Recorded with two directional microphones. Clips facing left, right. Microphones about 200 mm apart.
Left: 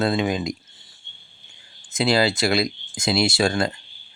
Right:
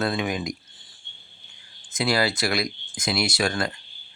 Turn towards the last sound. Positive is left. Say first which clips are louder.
# left 4 dB
turn(degrees=25)  # may be behind; listen again after turning